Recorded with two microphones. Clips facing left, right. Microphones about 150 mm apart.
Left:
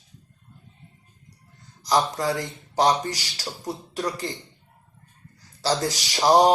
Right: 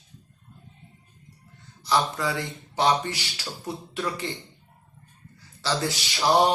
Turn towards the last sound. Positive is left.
turn(degrees=40)  # may be behind; listen again after turning